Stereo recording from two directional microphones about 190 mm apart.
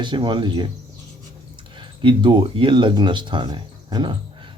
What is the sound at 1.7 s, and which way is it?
Speech, 25° right (ahead or behind).